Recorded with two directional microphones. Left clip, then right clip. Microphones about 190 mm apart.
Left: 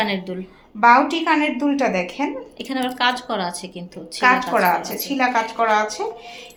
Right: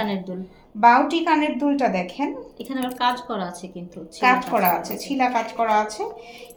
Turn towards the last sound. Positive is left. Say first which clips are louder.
# left 3 dB
turn(degrees=5)  # may be behind; listen again after turning